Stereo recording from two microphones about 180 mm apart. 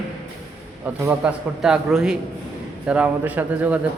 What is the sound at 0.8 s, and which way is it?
A man's voice, 10° right (ahead or behind).